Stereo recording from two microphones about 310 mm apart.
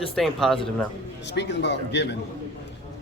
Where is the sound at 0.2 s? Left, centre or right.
Centre.